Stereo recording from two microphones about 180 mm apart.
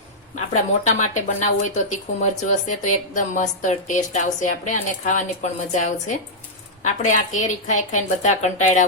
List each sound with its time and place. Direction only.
0.3 s a woman's voice: 40° left (ahead or behind)